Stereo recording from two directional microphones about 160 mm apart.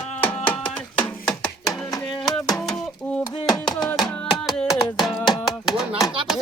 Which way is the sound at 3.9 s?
5° left (ahead or behind).